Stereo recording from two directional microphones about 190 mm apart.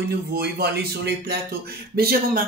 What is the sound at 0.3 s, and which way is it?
Speech, 55° right (ahead or behind).